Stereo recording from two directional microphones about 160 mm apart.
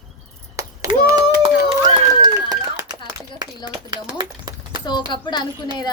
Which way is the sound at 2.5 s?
20° right (ahead or behind).